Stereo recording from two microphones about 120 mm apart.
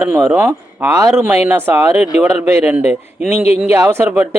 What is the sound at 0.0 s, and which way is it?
A man's voice, 10° right (ahead or behind).